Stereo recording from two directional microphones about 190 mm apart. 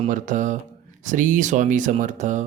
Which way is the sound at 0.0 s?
40° right (ahead or behind).